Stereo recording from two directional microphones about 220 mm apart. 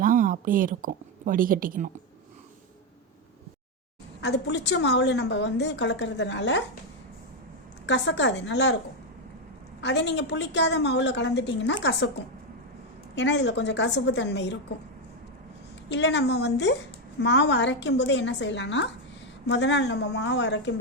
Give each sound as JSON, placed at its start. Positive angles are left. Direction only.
{"t": 0.0, "sound": "a woman's voice", "side_deg": -40}
{"t": 4.2, "sound": "a woman's voice", "side_deg": 50}
{"t": 7.9, "sound": "a woman's voice", "side_deg": 55}
{"t": 9.8, "sound": "a woman's voice", "side_deg": 55}
{"t": 13.1, "sound": "a woman's voice", "side_deg": 55}
{"t": 15.9, "sound": "a woman's voice", "side_deg": 55}